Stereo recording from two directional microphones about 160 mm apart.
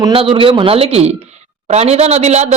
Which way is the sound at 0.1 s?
35° right (ahead or behind).